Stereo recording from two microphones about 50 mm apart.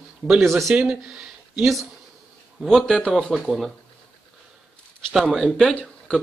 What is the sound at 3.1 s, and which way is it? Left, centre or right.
Speech, centre.